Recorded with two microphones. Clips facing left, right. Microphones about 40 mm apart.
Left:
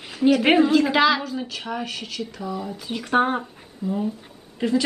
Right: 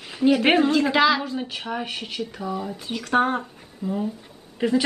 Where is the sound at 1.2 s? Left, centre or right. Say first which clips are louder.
Right 1 dB; centre.